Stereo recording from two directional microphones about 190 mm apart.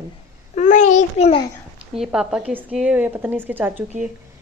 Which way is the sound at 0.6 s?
40° left (ahead or behind).